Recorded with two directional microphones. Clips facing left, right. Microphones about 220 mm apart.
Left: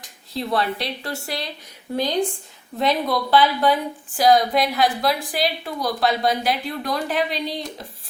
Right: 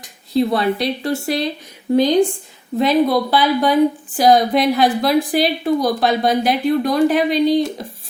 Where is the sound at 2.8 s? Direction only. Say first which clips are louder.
Right 7 dB; 10° right (ahead or behind).